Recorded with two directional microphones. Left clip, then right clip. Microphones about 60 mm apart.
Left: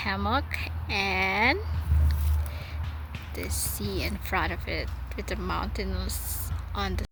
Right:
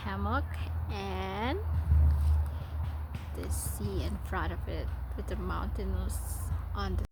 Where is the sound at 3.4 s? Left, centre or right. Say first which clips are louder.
Left 7 dB; left.